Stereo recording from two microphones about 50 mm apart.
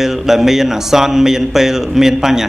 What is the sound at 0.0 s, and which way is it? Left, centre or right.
Mantra, centre.